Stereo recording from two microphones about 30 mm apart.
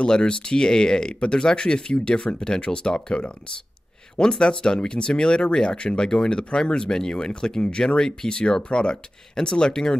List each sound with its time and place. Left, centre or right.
0.0 s speech: left